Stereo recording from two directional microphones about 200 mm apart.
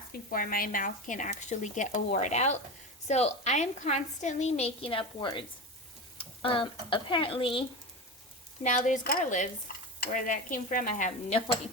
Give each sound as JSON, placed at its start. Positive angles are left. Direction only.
{"t": 0.3, "sound": "a woman's voice", "side_deg": 45}
{"t": 8.6, "sound": "a woman's voice", "side_deg": 40}